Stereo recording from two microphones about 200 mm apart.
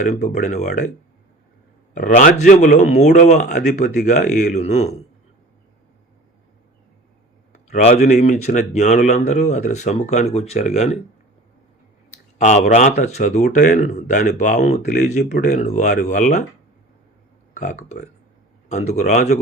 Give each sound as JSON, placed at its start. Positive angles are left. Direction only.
{"t": 0.0, "sound": "speech", "side_deg": 35}
{"t": 1.9, "sound": "speech", "side_deg": 40}
{"t": 7.7, "sound": "a man's voice", "side_deg": 30}
{"t": 12.1, "sound": "speech", "side_deg": 35}
{"t": 17.5, "sound": "speech", "side_deg": 40}